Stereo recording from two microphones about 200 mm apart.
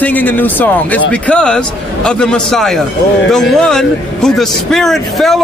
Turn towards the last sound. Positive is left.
turn(degrees=0)  # may be behind; listen again after turning